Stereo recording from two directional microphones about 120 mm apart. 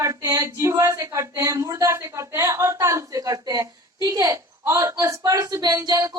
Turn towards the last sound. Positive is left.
turn(degrees=-30)  # may be behind; listen again after turning